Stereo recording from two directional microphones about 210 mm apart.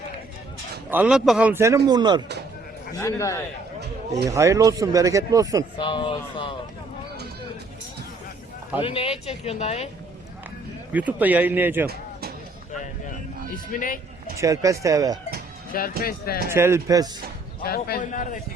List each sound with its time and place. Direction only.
0.9 s speech: 5° right (ahead or behind)
2.9 s a man's voice: 15° left (ahead or behind)
4.3 s speech: 15° right (ahead or behind)
5.7 s speech: 25° left (ahead or behind)
8.8 s speech: 25° left (ahead or behind)
10.9 s speech: 10° right (ahead or behind)
13.7 s speech: 40° left (ahead or behind)
14.3 s speech: 15° right (ahead or behind)
15.7 s a man's voice: 45° left (ahead or behind)
16.5 s speech: 10° right (ahead or behind)
17.6 s a man's voice: 45° left (ahead or behind)